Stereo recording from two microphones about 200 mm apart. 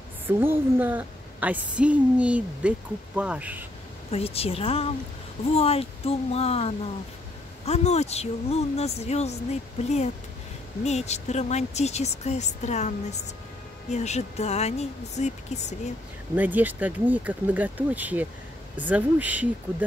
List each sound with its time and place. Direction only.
0.3 s a woman's voice: 10° right (ahead or behind)
4.1 s a woman's voice: 30° left (ahead or behind)
16.3 s a woman's voice: 10° right (ahead or behind)